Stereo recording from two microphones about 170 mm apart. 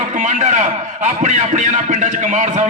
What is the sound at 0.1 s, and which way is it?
A man's voice, 45° right (ahead or behind).